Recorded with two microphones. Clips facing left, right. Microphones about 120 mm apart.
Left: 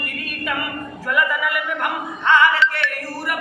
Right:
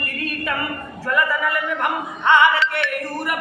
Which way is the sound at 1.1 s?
5° left (ahead or behind).